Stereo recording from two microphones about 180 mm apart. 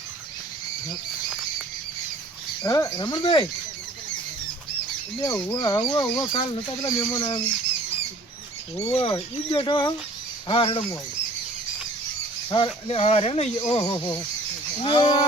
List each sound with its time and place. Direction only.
2.6 s speech: 20° left (ahead or behind)
5.2 s speech: 20° left (ahead or behind)
8.9 s speech: 30° left (ahead or behind)
12.5 s speech: 30° left (ahead or behind)